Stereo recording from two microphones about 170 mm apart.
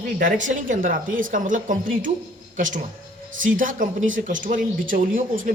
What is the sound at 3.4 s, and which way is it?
A woman's voice, 55° right (ahead or behind).